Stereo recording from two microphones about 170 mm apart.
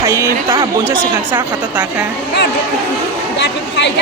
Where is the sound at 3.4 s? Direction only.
90° left.